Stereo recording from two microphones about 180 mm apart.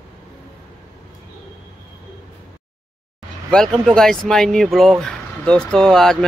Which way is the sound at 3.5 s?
5° left (ahead or behind).